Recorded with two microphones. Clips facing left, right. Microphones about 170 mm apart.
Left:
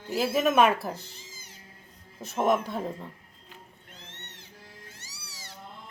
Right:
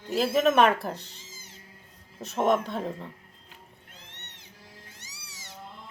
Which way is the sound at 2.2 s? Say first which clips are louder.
Right 1 dB; 5° left (ahead or behind).